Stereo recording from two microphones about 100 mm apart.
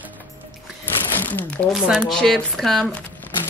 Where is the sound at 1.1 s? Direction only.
20° left (ahead or behind).